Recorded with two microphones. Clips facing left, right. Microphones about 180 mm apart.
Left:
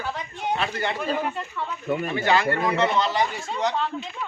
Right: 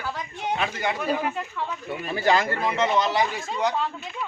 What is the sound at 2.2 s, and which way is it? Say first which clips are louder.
Speech: right 2 dB; 40° right (ahead or behind).